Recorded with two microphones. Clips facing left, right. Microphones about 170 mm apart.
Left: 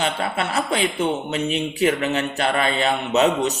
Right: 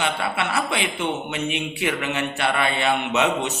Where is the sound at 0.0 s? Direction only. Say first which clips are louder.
Left 1 dB; 40° left (ahead or behind).